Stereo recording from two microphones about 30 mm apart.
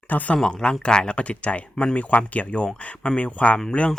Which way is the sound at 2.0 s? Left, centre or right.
Left.